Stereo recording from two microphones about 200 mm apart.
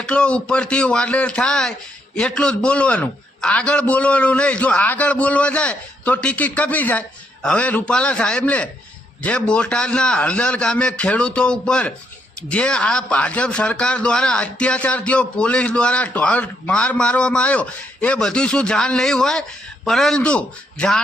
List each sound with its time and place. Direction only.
0.0 s a man's voice: 5° left (ahead or behind)